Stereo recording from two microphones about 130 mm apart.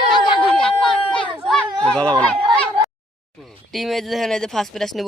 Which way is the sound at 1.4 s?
5° left (ahead or behind).